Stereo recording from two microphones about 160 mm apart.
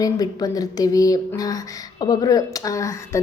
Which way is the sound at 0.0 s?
20° left (ahead or behind).